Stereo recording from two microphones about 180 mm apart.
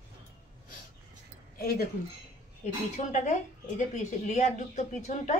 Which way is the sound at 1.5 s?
60° left (ahead or behind).